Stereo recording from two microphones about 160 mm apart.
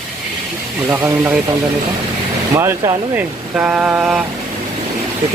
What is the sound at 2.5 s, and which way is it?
Speech, 20° right (ahead or behind).